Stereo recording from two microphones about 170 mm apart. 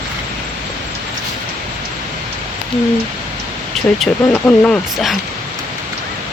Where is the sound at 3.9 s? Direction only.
5° left (ahead or behind).